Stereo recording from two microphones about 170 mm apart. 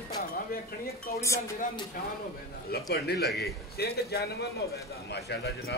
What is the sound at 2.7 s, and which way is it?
Speech, 70° left (ahead or behind).